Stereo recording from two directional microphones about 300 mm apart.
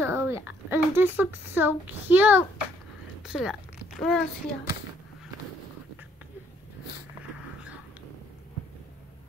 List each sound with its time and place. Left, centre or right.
0.0 s a child's voice: centre